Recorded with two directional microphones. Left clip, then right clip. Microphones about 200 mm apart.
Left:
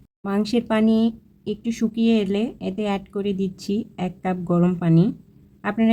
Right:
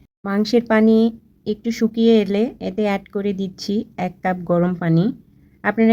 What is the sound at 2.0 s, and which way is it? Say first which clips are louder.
Speech: right 6 dB; 25° right (ahead or behind).